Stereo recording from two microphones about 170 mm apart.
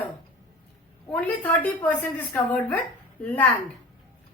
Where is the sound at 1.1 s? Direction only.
10° left (ahead or behind).